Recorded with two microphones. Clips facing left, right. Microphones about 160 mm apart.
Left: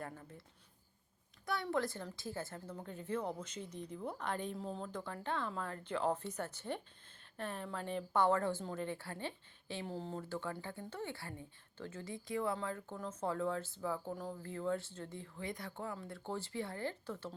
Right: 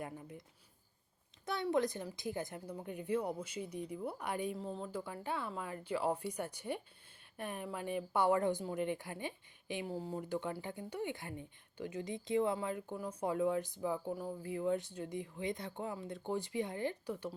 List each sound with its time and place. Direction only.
0.0 s speech: 15° right (ahead or behind)
1.6 s speech: 15° right (ahead or behind)